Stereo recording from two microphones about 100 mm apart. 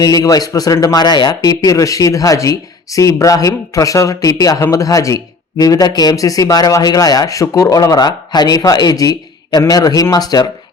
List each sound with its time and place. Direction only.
0.0 s speech: 40° left (ahead or behind)